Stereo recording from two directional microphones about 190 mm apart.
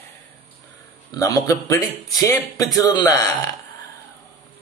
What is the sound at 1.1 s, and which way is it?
A man's voice, 15° left (ahead or behind).